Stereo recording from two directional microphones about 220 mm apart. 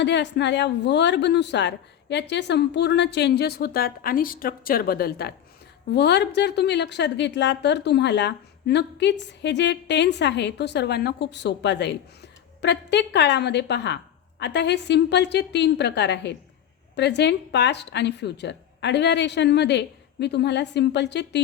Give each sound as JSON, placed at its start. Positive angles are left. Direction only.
{"t": 0.0, "sound": "a woman's voice", "side_deg": 55}